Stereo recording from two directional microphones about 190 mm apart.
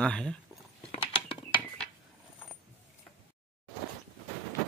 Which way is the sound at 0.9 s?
25° left (ahead or behind).